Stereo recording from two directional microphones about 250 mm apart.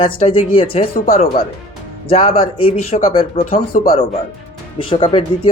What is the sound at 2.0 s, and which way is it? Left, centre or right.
Speech, left.